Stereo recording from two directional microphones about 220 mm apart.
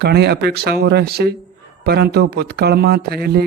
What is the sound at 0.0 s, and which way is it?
Speech, 50° right (ahead or behind).